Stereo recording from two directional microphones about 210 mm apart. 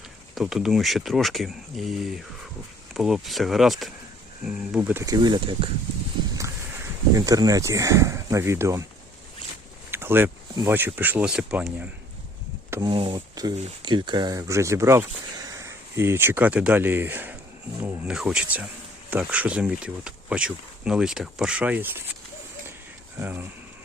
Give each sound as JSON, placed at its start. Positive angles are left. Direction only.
{"t": 0.3, "sound": "speech", "side_deg": 0}
{"t": 7.2, "sound": "speech", "side_deg": -15}
{"t": 9.9, "sound": "speech", "side_deg": -10}
{"t": 12.7, "sound": "speech", "side_deg": -20}
{"t": 23.2, "sound": "speech", "side_deg": -15}